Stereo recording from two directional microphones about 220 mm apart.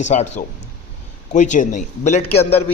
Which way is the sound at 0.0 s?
30° left (ahead or behind).